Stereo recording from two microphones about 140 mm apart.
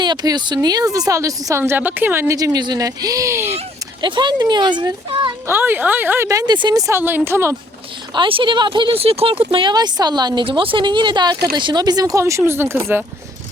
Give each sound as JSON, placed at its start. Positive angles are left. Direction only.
{"t": 0.0, "sound": "a woman's voice", "side_deg": -30}
{"t": 4.0, "sound": "speech", "side_deg": -35}
{"t": 5.5, "sound": "speech", "side_deg": -15}
{"t": 8.1, "sound": "a woman's voice", "side_deg": -35}